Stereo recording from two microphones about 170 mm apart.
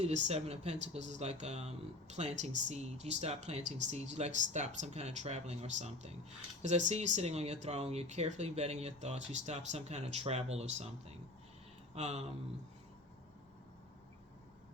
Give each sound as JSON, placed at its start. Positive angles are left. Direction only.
{"t": 0.0, "sound": "speech", "side_deg": -40}